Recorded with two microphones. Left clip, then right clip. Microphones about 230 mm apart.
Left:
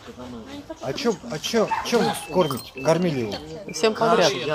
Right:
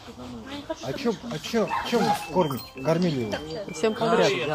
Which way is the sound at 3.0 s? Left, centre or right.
Centre.